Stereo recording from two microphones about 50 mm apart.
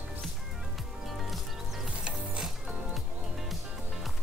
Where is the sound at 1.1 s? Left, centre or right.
Centre.